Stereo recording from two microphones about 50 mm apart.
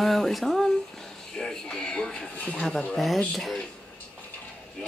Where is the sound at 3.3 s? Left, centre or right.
Centre.